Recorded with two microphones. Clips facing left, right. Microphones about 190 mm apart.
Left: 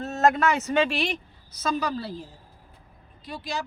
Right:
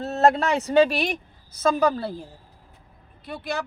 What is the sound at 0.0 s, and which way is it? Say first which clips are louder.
A woman's voice: right 2 dB; 35° right (ahead or behind).